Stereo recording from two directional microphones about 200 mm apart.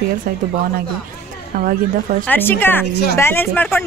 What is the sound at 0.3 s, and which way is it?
Speech, 45° right (ahead or behind).